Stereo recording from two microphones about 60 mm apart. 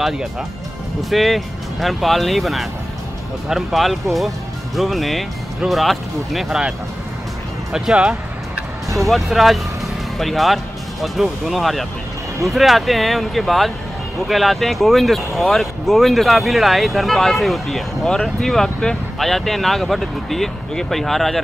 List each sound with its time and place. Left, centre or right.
1.1 s speech: centre
7.7 s speech: centre
9.1 s speech: centre